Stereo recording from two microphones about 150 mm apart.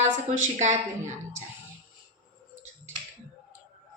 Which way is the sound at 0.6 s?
50° right (ahead or behind).